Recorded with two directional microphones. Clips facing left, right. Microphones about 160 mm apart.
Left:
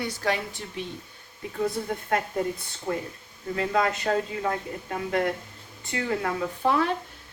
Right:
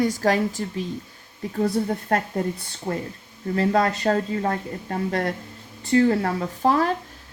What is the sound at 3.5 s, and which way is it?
Speech, 35° right (ahead or behind).